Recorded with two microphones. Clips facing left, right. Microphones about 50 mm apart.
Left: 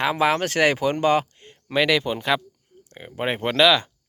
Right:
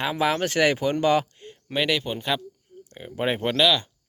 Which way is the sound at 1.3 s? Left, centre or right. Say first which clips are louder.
Right 5 dB; left.